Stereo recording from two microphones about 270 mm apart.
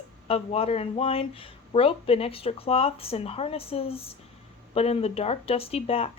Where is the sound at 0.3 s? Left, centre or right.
Left.